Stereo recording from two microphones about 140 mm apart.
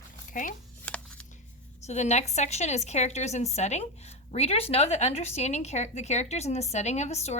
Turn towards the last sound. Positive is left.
turn(degrees=50)  # may be behind; listen again after turning